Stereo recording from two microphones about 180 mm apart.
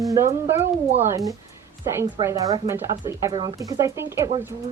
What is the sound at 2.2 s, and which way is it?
Speech, 20° right (ahead or behind).